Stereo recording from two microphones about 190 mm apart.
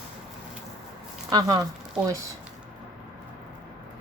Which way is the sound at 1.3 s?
20° right (ahead or behind).